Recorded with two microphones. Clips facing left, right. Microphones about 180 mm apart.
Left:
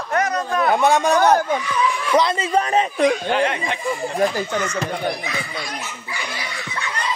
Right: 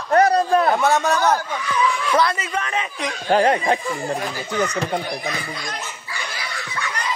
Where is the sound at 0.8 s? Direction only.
15° left (ahead or behind); by 2.9 s 35° left (ahead or behind).